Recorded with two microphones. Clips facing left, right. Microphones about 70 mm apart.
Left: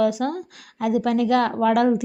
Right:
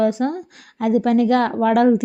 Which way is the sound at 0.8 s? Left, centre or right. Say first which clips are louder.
Right 4 dB; right.